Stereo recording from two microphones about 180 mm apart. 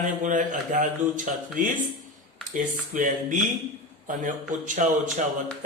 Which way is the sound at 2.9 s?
50° right (ahead or behind).